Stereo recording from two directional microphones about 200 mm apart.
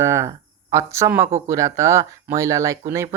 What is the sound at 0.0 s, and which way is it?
Speech, 15° right (ahead or behind).